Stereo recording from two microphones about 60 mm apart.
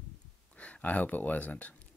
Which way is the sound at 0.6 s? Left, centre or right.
Left.